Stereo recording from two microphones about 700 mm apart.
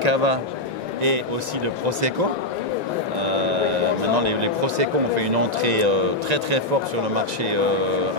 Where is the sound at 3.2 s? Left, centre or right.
Right.